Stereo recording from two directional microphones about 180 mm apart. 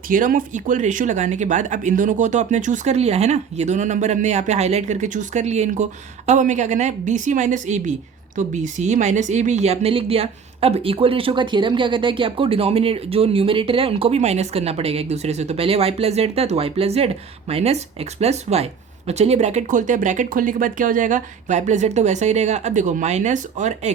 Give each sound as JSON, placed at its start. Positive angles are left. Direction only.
{"t": 0.1, "sound": "speech", "side_deg": -50}